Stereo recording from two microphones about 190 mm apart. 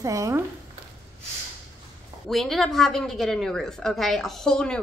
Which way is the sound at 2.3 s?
Centre (ahead or behind).